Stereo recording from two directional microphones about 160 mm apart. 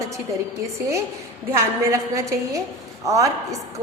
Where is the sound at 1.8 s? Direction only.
20° right (ahead or behind).